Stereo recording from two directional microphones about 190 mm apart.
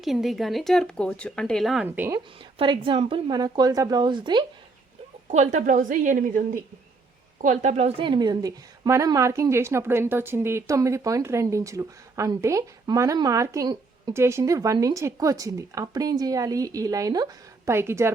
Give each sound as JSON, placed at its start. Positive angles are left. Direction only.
{"t": 0.0, "sound": "speech", "side_deg": 0}
{"t": 2.1, "sound": "a woman's voice", "side_deg": -25}
{"t": 5.3, "sound": "a woman's voice", "side_deg": -40}